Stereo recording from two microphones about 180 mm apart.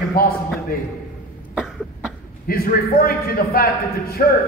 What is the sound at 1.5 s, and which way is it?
Cough, centre (ahead or behind).